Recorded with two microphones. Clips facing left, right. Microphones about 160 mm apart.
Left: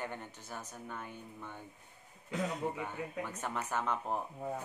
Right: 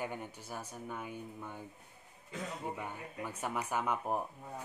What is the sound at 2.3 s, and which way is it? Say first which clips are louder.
Speech: left 7 dB; 90° left.